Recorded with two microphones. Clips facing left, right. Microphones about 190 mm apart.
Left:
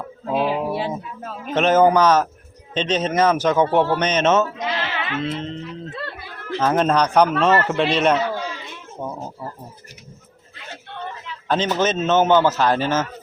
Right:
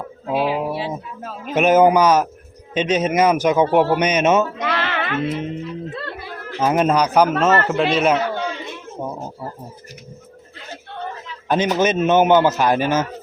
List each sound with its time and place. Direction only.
0.3 s a man's voice: 5° right (ahead or behind)
4.6 s music: 65° right (ahead or behind)
5.2 s a man's voice: 10° right (ahead or behind)
11.4 s a man's voice: 15° right (ahead or behind)